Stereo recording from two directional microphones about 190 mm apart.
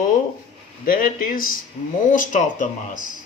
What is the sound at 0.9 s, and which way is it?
Speech, 50° left (ahead or behind).